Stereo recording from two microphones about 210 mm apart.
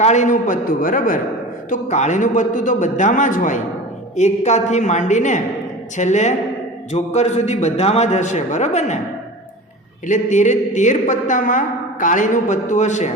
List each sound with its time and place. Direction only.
0.0 s a woman's voice: 35° left (ahead or behind)
10.1 s a woman's voice: 35° left (ahead or behind)